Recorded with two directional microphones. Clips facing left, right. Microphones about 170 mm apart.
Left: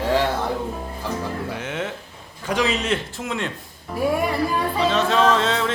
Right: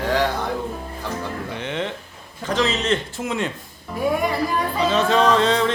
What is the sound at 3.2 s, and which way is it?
Speech, centre (ahead or behind).